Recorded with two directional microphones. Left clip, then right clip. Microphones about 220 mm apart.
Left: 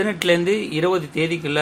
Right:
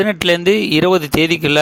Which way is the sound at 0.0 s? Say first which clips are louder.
Right 5 dB; 45° right (ahead or behind).